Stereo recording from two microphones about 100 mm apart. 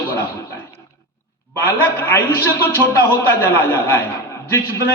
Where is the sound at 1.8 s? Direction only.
25° left (ahead or behind).